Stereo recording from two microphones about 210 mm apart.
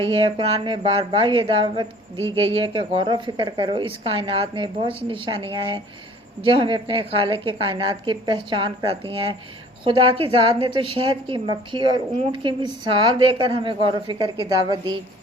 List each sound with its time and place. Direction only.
0.0 s a woman's voice: 25° right (ahead or behind)